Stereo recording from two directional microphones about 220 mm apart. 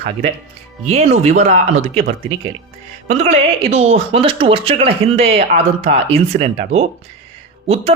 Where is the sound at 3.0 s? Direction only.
30° right (ahead or behind).